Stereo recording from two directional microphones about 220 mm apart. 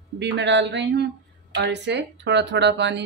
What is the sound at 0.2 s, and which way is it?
Speech, 50° right (ahead or behind).